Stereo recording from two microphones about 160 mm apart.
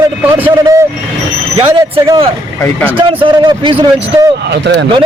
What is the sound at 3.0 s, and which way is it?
Speech, 35° right (ahead or behind).